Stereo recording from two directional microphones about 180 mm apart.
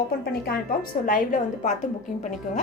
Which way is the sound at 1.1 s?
45° left (ahead or behind).